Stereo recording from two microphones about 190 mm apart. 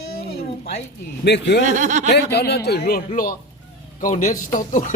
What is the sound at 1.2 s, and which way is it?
Speech, 65° left (ahead or behind).